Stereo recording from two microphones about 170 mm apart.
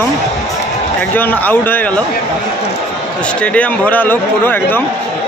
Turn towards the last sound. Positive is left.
turn(degrees=10)  # may be behind; listen again after turning